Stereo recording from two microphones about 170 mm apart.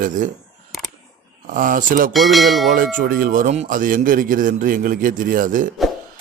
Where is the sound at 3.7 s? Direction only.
55° right (ahead or behind).